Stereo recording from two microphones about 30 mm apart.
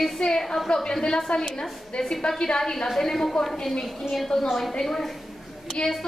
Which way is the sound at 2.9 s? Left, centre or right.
Centre.